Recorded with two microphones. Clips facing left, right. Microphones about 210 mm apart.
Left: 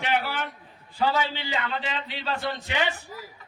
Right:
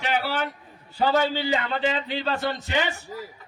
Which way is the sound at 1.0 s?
40° right (ahead or behind).